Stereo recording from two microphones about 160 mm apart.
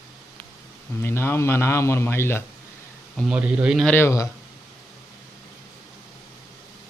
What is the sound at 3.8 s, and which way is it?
Speech, 15° left (ahead or behind).